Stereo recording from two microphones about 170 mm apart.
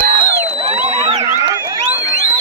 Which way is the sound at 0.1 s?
40° right (ahead or behind).